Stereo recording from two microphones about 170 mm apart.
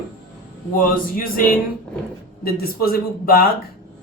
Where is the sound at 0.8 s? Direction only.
55° left (ahead or behind).